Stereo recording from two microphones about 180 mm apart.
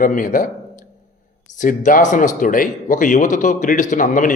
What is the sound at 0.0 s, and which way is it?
A man's voice, 50° left (ahead or behind).